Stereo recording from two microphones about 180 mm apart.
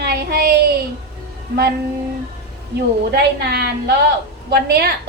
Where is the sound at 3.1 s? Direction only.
65° right (ahead or behind).